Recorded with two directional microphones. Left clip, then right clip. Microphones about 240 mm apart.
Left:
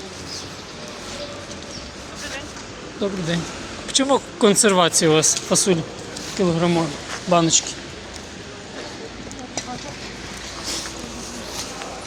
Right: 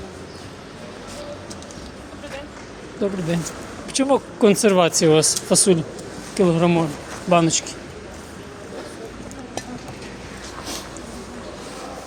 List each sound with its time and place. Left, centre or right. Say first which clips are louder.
3.0 s speech: right 1 dB; centre